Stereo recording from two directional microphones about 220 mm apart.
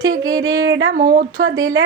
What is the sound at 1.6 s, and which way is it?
Speech, 60° right (ahead or behind).